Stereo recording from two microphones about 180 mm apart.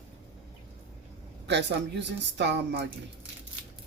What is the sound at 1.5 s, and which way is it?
Speech, 75° right (ahead or behind).